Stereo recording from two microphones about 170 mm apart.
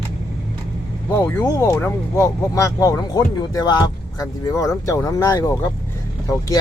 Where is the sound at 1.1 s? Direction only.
15° left (ahead or behind).